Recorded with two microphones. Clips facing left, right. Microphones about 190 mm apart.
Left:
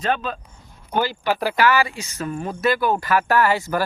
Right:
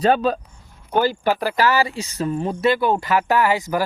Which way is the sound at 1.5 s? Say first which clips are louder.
Even; 35° right (ahead or behind).